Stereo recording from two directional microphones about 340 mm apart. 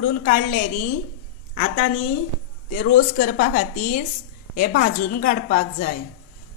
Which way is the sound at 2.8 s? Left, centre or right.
Left.